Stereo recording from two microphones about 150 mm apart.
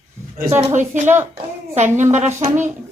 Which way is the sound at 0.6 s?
55° right (ahead or behind).